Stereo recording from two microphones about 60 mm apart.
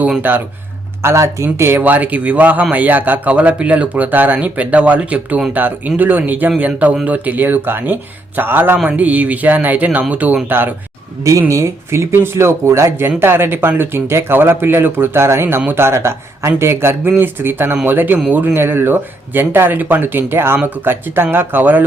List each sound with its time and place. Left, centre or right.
0.2 s speech: right
1.0 s speech: right
1.8 s a man's voice: right
8.8 s a man's voice: right
11.2 s speech: right
13.1 s speech: right
17.2 s speech: right